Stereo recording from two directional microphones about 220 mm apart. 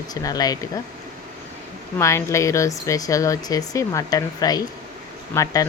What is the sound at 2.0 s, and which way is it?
Speech, 15° left (ahead or behind).